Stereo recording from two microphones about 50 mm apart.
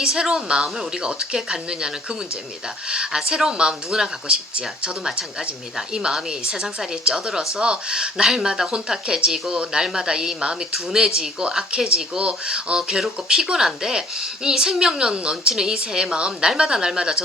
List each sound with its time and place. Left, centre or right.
0.0 s a woman's voice: centre